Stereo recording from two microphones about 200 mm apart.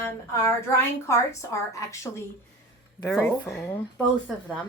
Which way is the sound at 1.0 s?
15° left (ahead or behind).